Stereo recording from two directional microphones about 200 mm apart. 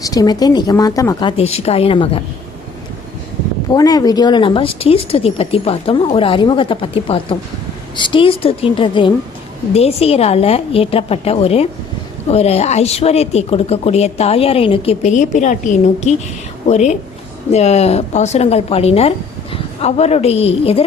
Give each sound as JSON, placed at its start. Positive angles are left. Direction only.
{"t": 0.0, "sound": "speech", "side_deg": 20}
{"t": 3.7, "sound": "a woman's voice", "side_deg": 20}